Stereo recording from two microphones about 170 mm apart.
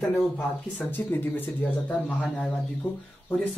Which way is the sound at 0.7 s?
10° left (ahead or behind).